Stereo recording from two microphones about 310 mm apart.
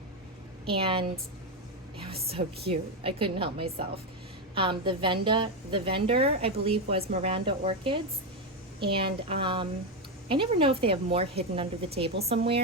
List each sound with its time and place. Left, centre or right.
0.6 s a woman's voice: centre